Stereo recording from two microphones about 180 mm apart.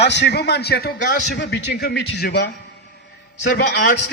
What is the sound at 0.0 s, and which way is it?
A man's voice, 70° left (ahead or behind).